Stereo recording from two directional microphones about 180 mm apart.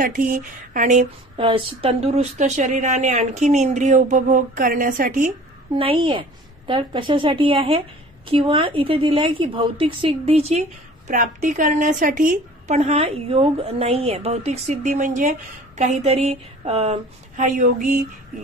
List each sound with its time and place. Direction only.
0.0 s a sound: 50° right (ahead or behind)
1.3 s a woman's voice: 30° right (ahead or behind); by 5.3 s 50° right (ahead or behind)
5.8 s a woman's voice: 30° right (ahead or behind)
11.1 s a woman's voice: 45° right (ahead or behind)